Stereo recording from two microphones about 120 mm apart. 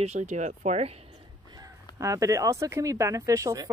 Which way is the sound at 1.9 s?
25° right (ahead or behind).